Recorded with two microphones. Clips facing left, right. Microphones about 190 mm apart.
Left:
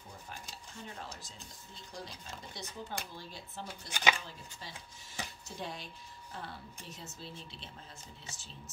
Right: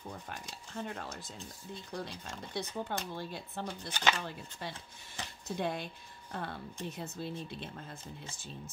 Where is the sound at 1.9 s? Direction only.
60° right (ahead or behind).